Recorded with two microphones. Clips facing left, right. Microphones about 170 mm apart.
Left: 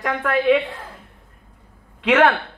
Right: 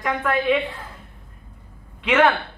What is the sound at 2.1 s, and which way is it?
Speech, 70° left (ahead or behind).